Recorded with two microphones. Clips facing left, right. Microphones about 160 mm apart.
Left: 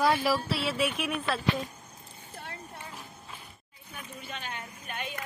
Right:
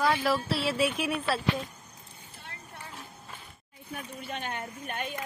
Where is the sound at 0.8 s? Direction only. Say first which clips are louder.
Right 2 dB; 35° right (ahead or behind).